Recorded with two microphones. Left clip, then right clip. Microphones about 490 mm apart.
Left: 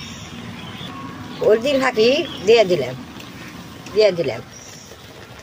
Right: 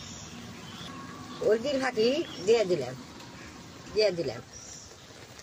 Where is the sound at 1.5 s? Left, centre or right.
Right.